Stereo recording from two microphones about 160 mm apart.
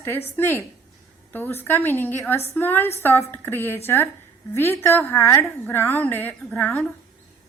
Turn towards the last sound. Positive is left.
turn(degrees=10)  # may be behind; listen again after turning